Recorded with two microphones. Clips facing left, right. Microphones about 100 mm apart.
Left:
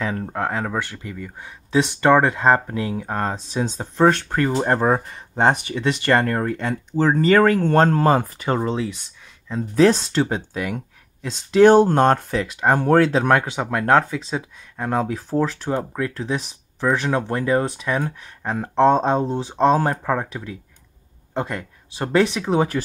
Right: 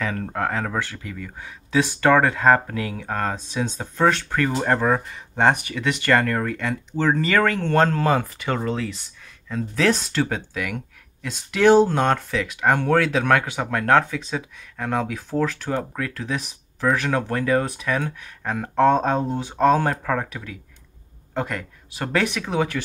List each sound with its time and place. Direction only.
0.0 s speech: 15° left (ahead or behind); by 8.5 s 40° left (ahead or behind)
8.5 s speech: 20° left (ahead or behind)
11.7 s speech: 50° left (ahead or behind); by 22.8 s 30° left (ahead or behind)